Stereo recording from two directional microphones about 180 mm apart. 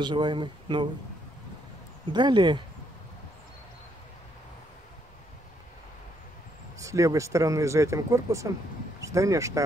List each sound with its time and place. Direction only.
0.0 s speech: 25° right (ahead or behind)
2.1 s speech: 25° right (ahead or behind)
6.8 s speech: 20° right (ahead or behind)